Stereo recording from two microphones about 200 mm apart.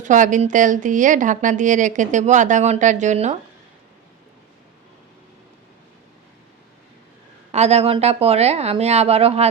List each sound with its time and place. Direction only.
0.0 s a woman's voice: 40° right (ahead or behind)
7.5 s a woman's voice: 30° right (ahead or behind)